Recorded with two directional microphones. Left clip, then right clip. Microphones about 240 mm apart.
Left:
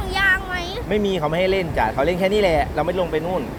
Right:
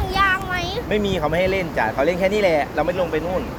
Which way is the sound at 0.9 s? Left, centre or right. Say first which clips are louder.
Left 1 dB; centre.